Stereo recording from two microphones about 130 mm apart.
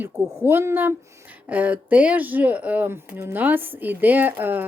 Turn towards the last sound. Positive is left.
turn(degrees=-15)  # may be behind; listen again after turning